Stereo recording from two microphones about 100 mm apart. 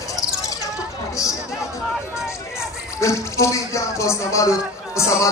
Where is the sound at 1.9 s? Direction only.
5° right (ahead or behind).